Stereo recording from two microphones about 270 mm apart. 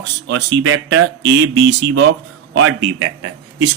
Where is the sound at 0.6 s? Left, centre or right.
Right.